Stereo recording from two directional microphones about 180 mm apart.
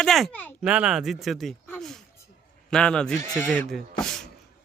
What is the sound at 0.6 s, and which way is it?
Speech, 5° right (ahead or behind).